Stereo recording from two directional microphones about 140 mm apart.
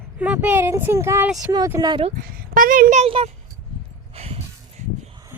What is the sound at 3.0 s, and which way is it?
Speech, 45° right (ahead or behind).